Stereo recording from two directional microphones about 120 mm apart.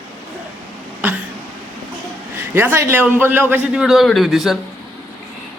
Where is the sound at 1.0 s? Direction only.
15° right (ahead or behind).